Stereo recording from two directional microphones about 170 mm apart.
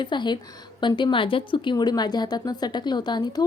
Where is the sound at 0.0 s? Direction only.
25° left (ahead or behind).